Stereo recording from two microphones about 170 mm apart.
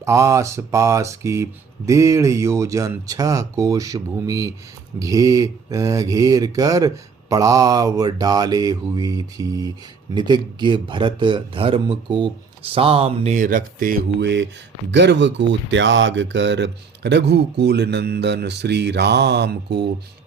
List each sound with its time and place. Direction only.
0.0 s mantra: 15° right (ahead or behind)
1.9 s speech: 20° right (ahead or behind); by 14.0 s 55° right (ahead or behind)
14.2 s speech: 90° right